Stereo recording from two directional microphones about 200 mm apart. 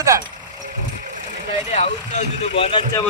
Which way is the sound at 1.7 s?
30° left (ahead or behind).